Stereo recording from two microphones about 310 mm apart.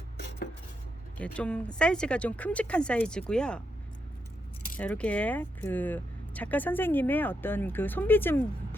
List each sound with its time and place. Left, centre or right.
0.2 s dishes: left
1.2 s speech: centre
4.8 s speech: centre